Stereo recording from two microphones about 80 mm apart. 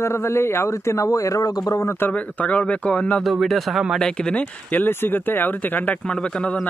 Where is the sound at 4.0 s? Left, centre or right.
Centre.